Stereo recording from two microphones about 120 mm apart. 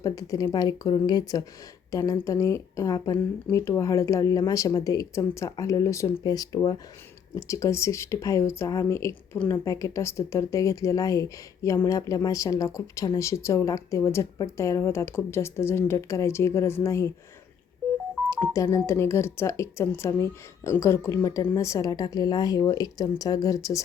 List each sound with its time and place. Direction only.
0.0 s a woman's voice: 30° left (ahead or behind)
18.5 s speech: 25° left (ahead or behind)